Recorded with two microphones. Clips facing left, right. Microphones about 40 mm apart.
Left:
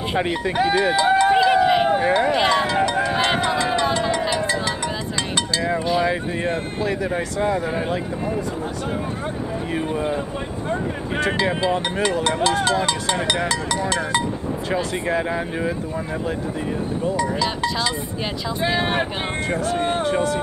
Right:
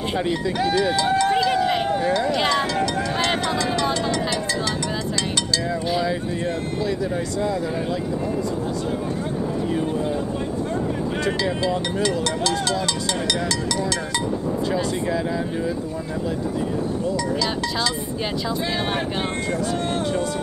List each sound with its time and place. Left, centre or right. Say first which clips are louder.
0.2 s speech: left 3 dB; left; by 1.9 s centre
1.9 s speech: left 3 dB; left
5.9 s speech: left 2 dB; left
9.9 s speech: left 1 dB; left
11.3 s speech: left 2 dB; left
14.7 s speech: left 3 dB; left
17.0 s speech: left 4 dB; left
18.6 s speech: left 8 dB; centre
20.0 s speech: left 3 dB; left